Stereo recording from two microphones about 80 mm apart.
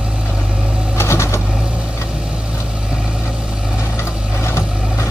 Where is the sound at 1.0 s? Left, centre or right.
Left.